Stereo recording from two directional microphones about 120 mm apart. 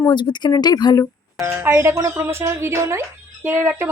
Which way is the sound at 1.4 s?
20° right (ahead or behind).